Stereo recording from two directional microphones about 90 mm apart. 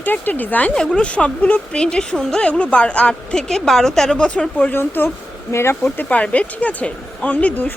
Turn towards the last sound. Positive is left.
turn(degrees=15)  # may be behind; listen again after turning